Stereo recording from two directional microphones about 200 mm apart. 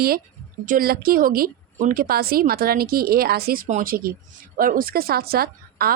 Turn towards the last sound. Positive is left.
turn(degrees=-50)  # may be behind; listen again after turning